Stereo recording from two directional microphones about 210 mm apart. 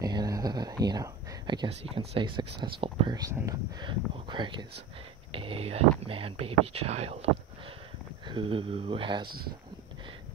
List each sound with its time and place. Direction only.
0.0 s whispering: 20° right (ahead or behind)
1.9 s speech: 25° right (ahead or behind)
8.3 s speech: 25° right (ahead or behind)